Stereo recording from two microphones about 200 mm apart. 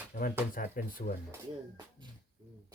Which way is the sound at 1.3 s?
20° right (ahead or behind).